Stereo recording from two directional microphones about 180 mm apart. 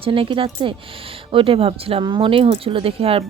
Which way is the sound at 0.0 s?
30° right (ahead or behind).